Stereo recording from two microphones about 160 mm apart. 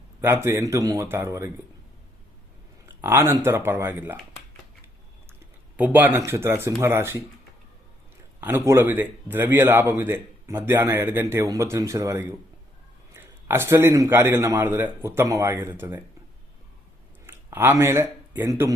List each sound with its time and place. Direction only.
0.2 s speech: 15° right (ahead or behind)
3.0 s speech: 15° right (ahead or behind)
5.7 s speech: 10° right (ahead or behind)
8.4 s speech: 15° right (ahead or behind)
17.2 s speech: 15° right (ahead or behind)